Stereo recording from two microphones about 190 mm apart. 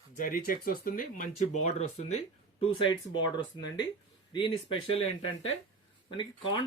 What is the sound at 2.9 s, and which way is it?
Speech, 25° left (ahead or behind).